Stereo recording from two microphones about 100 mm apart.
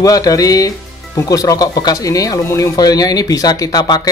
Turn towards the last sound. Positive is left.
turn(degrees=40)  # may be behind; listen again after turning